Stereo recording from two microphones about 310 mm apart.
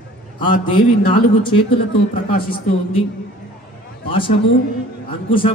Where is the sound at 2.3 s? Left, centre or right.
Left.